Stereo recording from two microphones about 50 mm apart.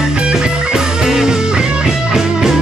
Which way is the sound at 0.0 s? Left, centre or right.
Centre.